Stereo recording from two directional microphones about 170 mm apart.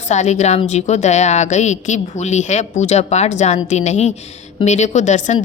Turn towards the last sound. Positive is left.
turn(degrees=45)  # may be behind; listen again after turning